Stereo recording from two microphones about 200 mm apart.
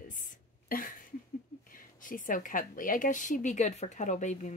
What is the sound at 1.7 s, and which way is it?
A woman's voice, 45° left (ahead or behind).